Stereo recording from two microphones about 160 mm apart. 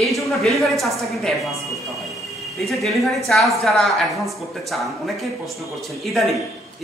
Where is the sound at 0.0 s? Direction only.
Centre (ahead or behind).